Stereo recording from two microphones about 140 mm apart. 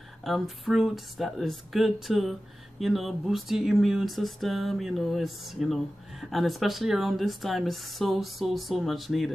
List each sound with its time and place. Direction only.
0.2 s speech: centre (ahead or behind)